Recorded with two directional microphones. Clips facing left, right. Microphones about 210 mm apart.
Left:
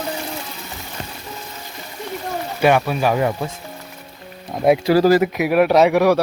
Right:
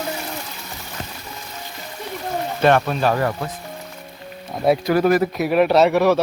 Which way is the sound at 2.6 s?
10° left (ahead or behind).